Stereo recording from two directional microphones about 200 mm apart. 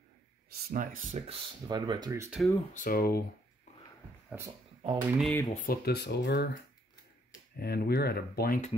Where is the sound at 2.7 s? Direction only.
45° left (ahead or behind).